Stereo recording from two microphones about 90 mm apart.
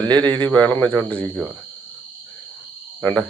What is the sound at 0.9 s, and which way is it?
Speech, 20° left (ahead or behind).